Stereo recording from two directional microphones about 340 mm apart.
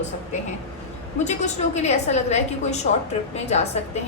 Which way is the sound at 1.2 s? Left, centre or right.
Centre.